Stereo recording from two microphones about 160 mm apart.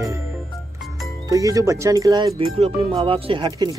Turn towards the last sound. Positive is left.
turn(degrees=-30)  # may be behind; listen again after turning